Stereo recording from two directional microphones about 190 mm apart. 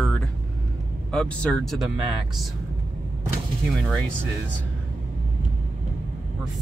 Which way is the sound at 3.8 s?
5° left (ahead or behind).